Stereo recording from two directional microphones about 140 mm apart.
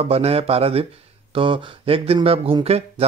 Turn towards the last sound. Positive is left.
turn(degrees=-45)  # may be behind; listen again after turning